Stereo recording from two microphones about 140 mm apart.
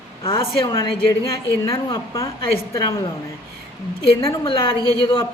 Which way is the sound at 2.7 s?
25° left (ahead or behind).